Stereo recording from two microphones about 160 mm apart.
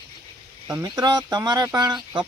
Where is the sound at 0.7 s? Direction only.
25° right (ahead or behind).